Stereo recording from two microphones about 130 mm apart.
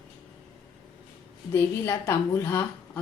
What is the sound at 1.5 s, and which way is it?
A woman's voice, 20° left (ahead or behind).